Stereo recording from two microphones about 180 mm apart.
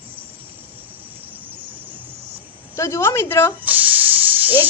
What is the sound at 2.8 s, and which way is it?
Speech, 15° left (ahead or behind).